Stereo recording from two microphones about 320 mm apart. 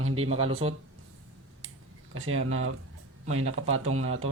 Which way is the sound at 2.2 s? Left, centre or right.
Right.